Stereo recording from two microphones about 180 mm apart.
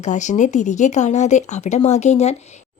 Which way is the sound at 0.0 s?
40° left (ahead or behind).